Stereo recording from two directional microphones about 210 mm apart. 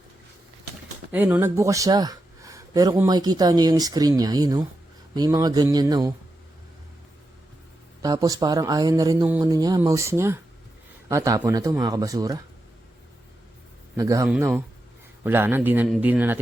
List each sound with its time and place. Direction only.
1.1 s speech: 10° right (ahead or behind)
8.0 s speech: 15° right (ahead or behind)
13.9 s speech: 15° right (ahead or behind)